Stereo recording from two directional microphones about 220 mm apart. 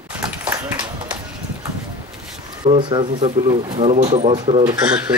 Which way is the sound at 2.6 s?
20° right (ahead or behind).